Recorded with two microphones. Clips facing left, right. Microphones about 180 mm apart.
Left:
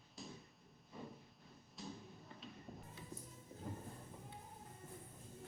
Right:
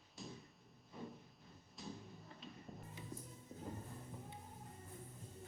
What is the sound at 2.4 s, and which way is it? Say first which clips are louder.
Music: even; centre (ahead or behind).